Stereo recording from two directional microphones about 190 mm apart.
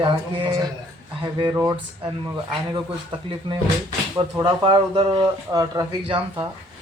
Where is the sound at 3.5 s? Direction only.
25° right (ahead or behind).